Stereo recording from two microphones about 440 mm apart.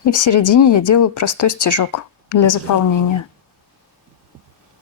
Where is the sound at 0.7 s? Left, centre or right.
Left.